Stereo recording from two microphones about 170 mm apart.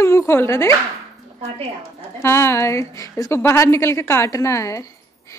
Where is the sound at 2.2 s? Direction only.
15° left (ahead or behind).